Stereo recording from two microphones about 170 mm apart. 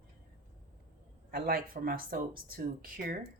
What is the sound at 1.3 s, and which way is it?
Speech, 60° right (ahead or behind).